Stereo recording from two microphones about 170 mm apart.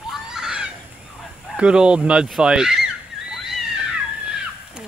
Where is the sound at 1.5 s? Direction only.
5° right (ahead or behind).